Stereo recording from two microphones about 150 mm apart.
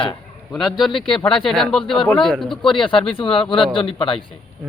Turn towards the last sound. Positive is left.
turn(degrees=35)  # may be behind; listen again after turning